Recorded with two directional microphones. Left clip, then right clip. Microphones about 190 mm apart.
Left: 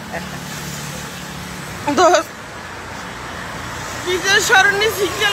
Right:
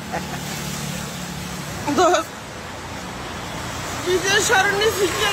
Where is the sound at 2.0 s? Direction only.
15° left (ahead or behind).